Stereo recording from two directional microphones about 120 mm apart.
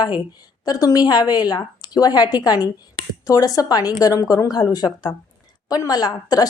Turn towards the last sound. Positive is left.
turn(degrees=35)  # may be behind; listen again after turning